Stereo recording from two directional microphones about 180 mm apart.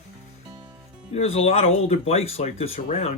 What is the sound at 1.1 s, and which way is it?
Speech, 35° left (ahead or behind).